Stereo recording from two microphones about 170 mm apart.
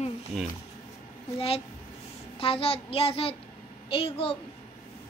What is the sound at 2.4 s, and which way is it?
Child singing, 35° left (ahead or behind).